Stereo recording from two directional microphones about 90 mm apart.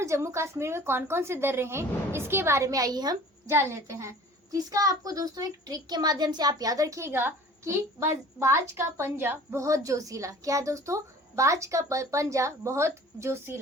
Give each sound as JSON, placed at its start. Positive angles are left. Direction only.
{"t": 0.0, "sound": "a woman's voice", "side_deg": -35}
{"t": 3.5, "sound": "a child's voice", "side_deg": -30}